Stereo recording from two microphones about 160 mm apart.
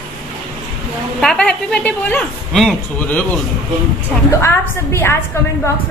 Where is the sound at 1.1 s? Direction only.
5° left (ahead or behind).